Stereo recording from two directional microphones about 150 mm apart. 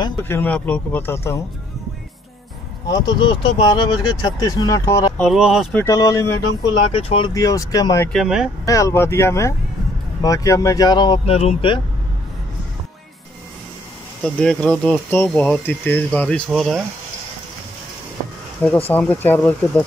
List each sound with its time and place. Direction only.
0.2 s speech: 15° left (ahead or behind)
2.9 s speech: 30° left (ahead or behind)
5.2 s speech: centre (ahead or behind)
5.8 s speech: 20° left (ahead or behind)
6.9 s speech: 40° left (ahead or behind)
7.3 s speech: 25° left (ahead or behind)
8.1 s speech: centre (ahead or behind)
8.6 s speech: 20° left (ahead or behind)
11.2 s speech: 40° left (ahead or behind)
14.2 s speech: 5° left (ahead or behind)
18.9 s speech: 10° left (ahead or behind)